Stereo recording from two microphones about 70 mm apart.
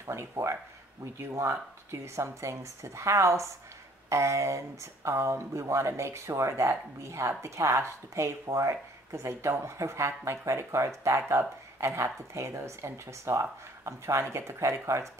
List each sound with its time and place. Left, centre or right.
0.0 s speech: right